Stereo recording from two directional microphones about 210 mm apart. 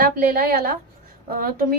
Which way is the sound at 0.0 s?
45° right (ahead or behind).